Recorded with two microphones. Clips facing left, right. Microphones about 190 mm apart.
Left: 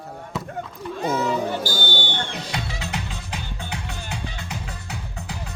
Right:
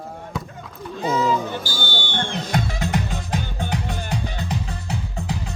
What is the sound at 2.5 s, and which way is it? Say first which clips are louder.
Music: right 9 dB; 50° right (ahead or behind).